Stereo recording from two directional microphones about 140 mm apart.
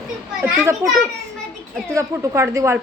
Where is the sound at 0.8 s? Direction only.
20° right (ahead or behind).